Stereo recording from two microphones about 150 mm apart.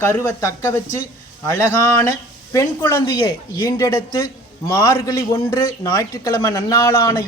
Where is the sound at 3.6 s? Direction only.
20° left (ahead or behind).